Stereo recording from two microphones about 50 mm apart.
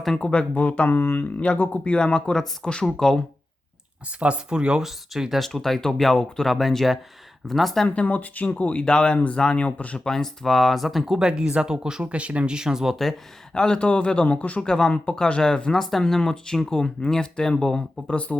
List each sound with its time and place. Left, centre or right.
0.2 s a man's voice: left
0.9 s speech: left
1.4 s a man's voice: left; by 2.8 s centre
4.2 s speech: right
4.8 s speech: centre
7.9 s speech: left
8.8 s a man's voice: centre
10.0 s speech: centre
11.2 s speech: centre
13.5 s a man's voice: centre
14.6 s speech: centre
15.7 s speech: centre
18.1 s a man's voice: left